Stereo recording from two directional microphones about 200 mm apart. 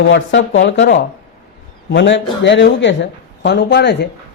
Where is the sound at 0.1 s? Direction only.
65° left (ahead or behind).